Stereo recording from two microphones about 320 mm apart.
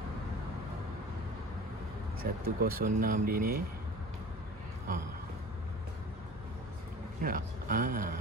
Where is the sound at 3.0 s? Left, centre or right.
Right.